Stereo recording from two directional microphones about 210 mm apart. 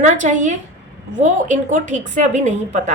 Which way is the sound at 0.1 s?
35° right (ahead or behind).